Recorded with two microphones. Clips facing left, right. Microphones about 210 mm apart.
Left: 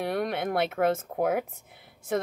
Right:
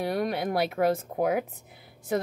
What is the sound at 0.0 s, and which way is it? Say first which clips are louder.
Speech: right 1 dB; centre (ahead or behind).